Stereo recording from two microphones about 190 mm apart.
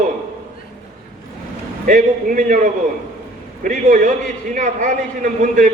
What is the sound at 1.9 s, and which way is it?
Speech, 45° right (ahead or behind).